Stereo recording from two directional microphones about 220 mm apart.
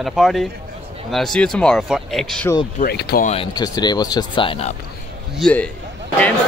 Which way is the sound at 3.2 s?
25° left (ahead or behind).